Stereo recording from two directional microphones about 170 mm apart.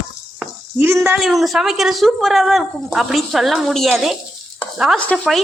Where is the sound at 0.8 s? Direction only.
15° right (ahead or behind).